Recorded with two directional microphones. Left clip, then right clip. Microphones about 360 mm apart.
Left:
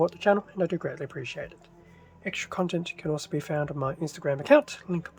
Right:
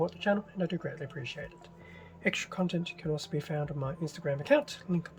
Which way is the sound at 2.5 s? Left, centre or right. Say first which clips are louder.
Left 5 dB; centre.